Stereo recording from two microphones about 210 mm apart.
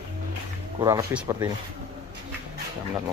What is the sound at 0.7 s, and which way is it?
Speech, 15° right (ahead or behind).